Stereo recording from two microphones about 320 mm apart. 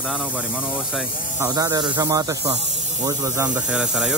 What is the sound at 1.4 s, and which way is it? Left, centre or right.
Speech, centre.